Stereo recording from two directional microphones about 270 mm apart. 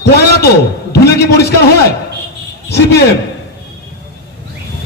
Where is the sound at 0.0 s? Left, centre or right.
Left.